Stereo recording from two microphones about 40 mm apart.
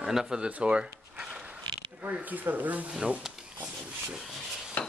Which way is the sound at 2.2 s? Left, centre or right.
Right.